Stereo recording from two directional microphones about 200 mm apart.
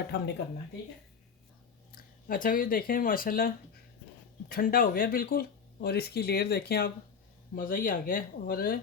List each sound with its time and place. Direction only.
0.1 s speech: 60° left (ahead or behind)
2.2 s speech: 45° left (ahead or behind)